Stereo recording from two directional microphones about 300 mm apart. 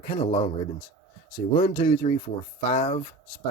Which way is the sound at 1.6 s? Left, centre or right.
Centre.